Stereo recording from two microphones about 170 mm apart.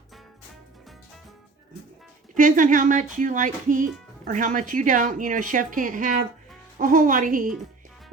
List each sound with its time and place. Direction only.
2.3 s speech: 50° right (ahead or behind)